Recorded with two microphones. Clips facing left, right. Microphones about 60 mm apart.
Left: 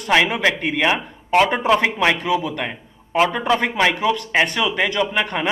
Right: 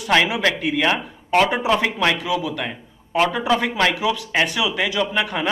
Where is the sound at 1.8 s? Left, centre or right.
Centre.